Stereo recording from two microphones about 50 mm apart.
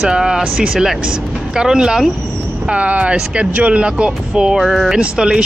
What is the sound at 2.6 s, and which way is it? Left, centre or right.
Speech, right.